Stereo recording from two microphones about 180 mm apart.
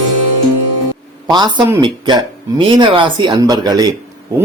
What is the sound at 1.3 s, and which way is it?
Speech, 20° right (ahead or behind).